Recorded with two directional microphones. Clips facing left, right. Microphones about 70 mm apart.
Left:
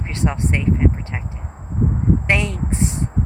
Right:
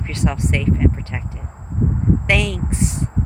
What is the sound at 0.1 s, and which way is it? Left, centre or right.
Speech, left.